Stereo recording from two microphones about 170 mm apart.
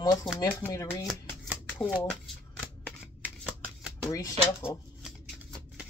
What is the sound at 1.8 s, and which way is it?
Speech, 25° left (ahead or behind).